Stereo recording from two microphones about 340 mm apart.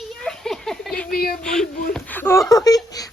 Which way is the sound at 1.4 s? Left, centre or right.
Centre.